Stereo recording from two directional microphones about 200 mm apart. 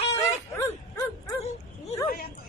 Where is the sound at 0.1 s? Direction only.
15° left (ahead or behind).